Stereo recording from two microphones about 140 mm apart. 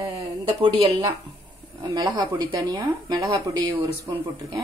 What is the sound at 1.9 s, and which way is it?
Speech, 30° right (ahead or behind).